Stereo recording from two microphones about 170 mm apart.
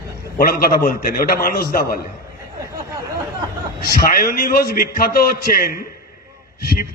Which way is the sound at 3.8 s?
55° left (ahead or behind).